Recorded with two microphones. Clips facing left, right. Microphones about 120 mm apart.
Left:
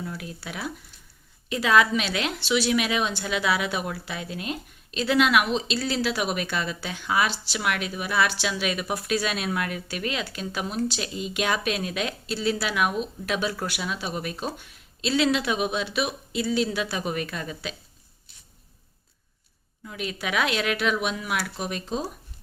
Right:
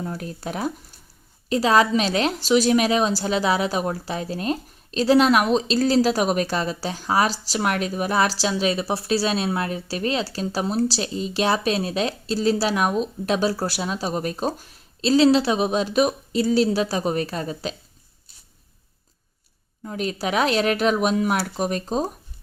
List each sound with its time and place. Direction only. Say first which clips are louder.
0.0 s a woman's voice: right 5 dB; 40° right (ahead or behind)
19.8 s a woman's voice: right 6 dB; 40° right (ahead or behind)